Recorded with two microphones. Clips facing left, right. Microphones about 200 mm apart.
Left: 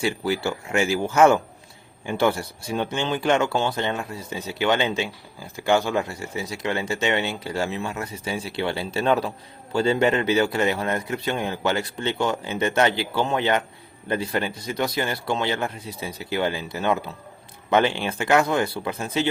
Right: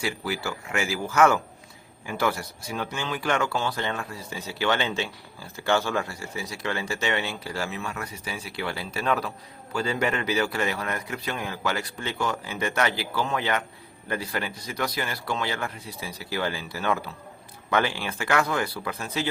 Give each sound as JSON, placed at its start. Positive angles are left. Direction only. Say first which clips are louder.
{"t": 0.0, "sound": "speech", "louder": "left 6 dB", "side_deg": 25}